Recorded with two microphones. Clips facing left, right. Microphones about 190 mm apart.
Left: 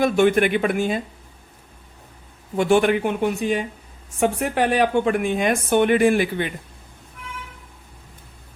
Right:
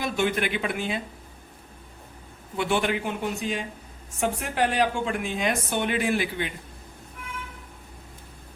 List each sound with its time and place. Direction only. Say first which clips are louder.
0.0 s speech: left 9 dB; 50° left (ahead or behind)
2.6 s a woman's voice: left 8 dB; 45° left (ahead or behind)